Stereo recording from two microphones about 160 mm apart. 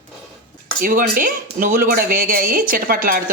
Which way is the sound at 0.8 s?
65° right (ahead or behind).